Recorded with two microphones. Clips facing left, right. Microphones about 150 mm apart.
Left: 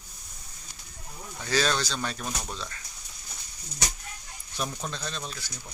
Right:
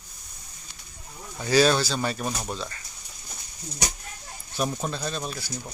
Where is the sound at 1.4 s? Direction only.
10° right (ahead or behind).